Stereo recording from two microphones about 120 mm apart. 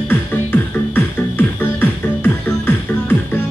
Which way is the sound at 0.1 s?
20° left (ahead or behind).